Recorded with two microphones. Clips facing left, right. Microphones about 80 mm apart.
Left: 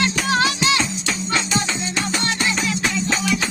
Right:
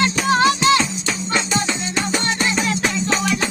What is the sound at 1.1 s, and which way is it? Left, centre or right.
Music, right.